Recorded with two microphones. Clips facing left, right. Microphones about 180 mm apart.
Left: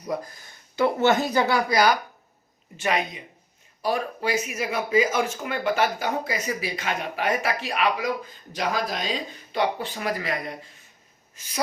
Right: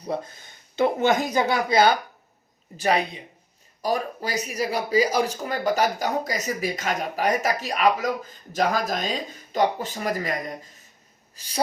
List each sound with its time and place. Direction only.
0.0 s speech: 25° right (ahead or behind)
2.7 s speech: 35° right (ahead or behind)